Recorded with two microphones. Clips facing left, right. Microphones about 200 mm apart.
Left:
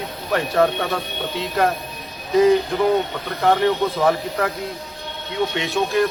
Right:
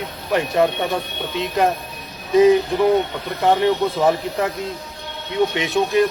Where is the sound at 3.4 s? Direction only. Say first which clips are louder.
Right 1 dB; 20° right (ahead or behind).